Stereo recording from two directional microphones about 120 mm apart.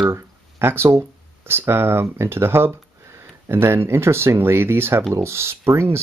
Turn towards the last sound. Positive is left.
turn(degrees=-20)  # may be behind; listen again after turning